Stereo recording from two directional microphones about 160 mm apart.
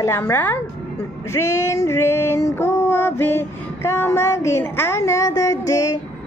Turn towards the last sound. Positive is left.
turn(degrees=20)  # may be behind; listen again after turning